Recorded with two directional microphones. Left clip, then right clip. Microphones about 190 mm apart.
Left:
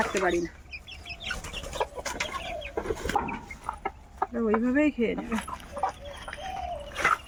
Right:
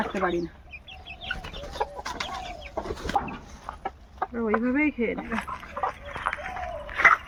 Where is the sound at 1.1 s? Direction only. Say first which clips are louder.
Right 1 dB; 20° right (ahead or behind).